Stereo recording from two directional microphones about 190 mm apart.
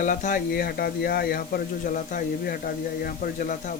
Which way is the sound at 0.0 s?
40° left (ahead or behind).